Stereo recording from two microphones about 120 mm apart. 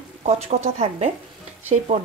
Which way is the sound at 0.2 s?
65° right (ahead or behind).